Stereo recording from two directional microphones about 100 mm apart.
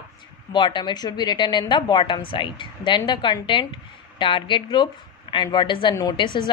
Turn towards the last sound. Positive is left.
turn(degrees=55)  # may be behind; listen again after turning